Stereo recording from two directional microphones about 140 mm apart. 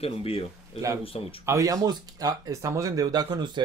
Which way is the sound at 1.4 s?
20° right (ahead or behind).